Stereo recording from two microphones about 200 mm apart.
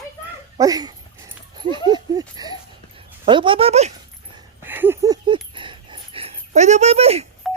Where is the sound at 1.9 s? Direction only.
20° right (ahead or behind).